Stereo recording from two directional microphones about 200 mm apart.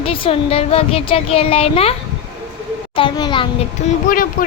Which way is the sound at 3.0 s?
25° left (ahead or behind).